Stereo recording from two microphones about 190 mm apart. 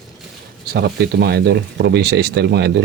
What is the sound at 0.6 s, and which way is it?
Speech, 55° right (ahead or behind).